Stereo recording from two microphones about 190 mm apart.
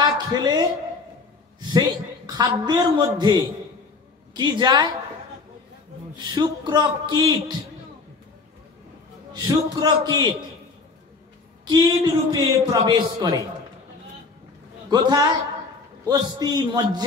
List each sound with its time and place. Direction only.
0.0 s a woman's voice: 20° right (ahead or behind)
6.1 s a man's voice: 25° right (ahead or behind)
9.3 s a man's voice: 20° right (ahead or behind)
11.6 s a man's voice: 20° right (ahead or behind)
14.9 s a man's voice: 20° right (ahead or behind)